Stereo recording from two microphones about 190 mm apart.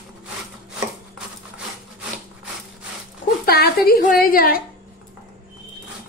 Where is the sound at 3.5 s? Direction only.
55° left (ahead or behind).